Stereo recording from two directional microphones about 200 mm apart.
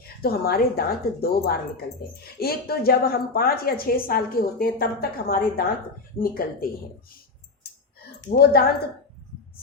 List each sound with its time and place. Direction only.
0.2 s a woman's voice: 50° left (ahead or behind)
8.3 s a woman's voice: 50° left (ahead or behind)